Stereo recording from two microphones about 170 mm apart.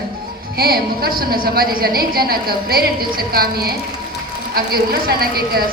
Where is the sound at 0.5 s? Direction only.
60° right (ahead or behind).